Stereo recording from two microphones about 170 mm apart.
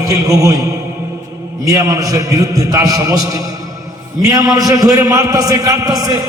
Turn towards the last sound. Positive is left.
turn(degrees=-20)  # may be behind; listen again after turning